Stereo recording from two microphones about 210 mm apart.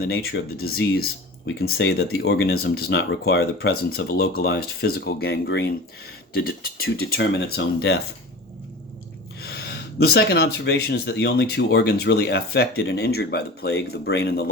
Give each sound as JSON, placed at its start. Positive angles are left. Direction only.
{"t": 0.0, "sound": "speech", "side_deg": 45}
{"t": 9.4, "sound": "speech", "side_deg": 50}